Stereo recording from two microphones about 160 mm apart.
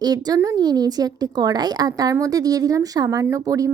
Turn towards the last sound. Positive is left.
turn(degrees=-20)  # may be behind; listen again after turning